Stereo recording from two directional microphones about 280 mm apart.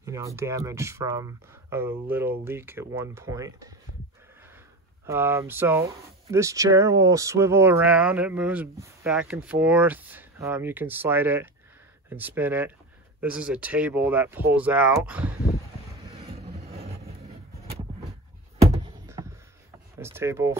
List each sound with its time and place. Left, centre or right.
0.0 s speech: centre
5.0 s speech: centre
16.1 s vehicle: right
19.0 s a sound: centre
20.0 s speech: centre